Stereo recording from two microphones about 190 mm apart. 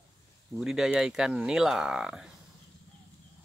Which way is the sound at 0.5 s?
Centre (ahead or behind).